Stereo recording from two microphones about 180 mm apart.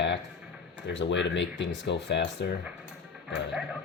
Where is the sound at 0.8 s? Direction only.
90° left; by 2.5 s 70° left (ahead or behind).